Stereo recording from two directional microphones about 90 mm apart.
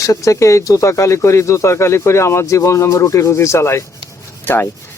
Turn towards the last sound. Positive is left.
turn(degrees=25)  # may be behind; listen again after turning